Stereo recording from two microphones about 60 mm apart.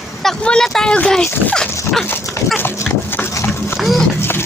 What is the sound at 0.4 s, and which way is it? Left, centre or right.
Speech, centre.